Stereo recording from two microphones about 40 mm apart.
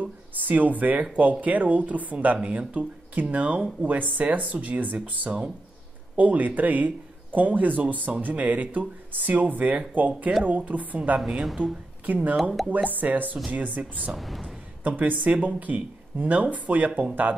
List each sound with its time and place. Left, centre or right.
0.0 s speech: right
11.1 s a woman's voice: centre
12.1 s speech: right
14.1 s speech: centre
14.8 s speech: right